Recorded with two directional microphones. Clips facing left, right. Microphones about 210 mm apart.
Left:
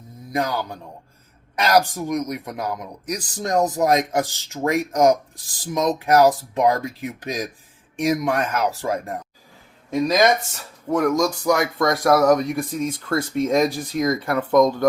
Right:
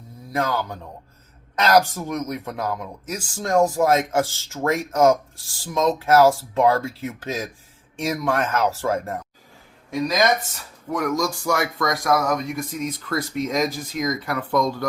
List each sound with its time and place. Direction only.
0.3 s speech: 15° left (ahead or behind)
10.9 s speech: 20° left (ahead or behind)